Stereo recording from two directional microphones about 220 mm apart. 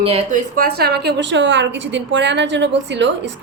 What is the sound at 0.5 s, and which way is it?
A woman's voice, 45° right (ahead or behind).